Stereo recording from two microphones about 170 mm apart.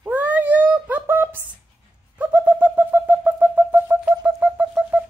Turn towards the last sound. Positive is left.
turn(degrees=-5)  # may be behind; listen again after turning